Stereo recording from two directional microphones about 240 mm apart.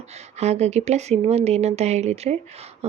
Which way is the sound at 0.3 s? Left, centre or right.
Right.